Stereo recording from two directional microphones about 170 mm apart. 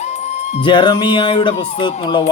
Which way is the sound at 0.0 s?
40° left (ahead or behind).